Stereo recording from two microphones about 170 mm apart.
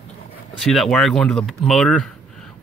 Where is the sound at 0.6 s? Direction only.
Centre (ahead or behind).